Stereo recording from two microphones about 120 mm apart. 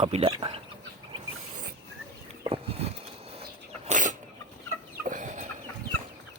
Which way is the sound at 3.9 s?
90° right.